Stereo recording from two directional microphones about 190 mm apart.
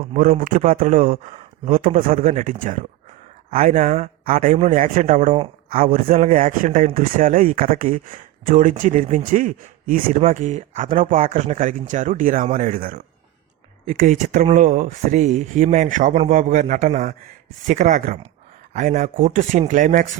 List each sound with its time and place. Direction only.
0.1 s a man's voice: 45° right (ahead or behind)